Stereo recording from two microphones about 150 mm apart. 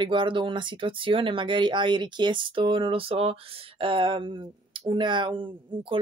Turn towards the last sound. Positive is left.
turn(degrees=-35)  # may be behind; listen again after turning